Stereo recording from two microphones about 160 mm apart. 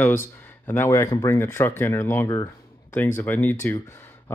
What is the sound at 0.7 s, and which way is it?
Speech, 15° left (ahead or behind).